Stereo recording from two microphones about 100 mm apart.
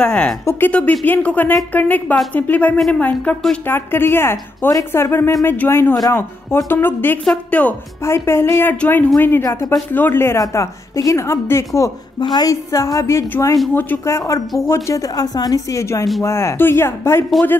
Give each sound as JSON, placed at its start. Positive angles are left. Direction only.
{"t": 0.0, "sound": "a woman's voice", "side_deg": 10}
{"t": 8.0, "sound": "a woman's voice", "side_deg": 25}
{"t": 9.4, "sound": "a woman's voice", "side_deg": 30}
{"t": 10.4, "sound": "a woman's voice", "side_deg": 35}
{"t": 12.2, "sound": "a woman's voice", "side_deg": 45}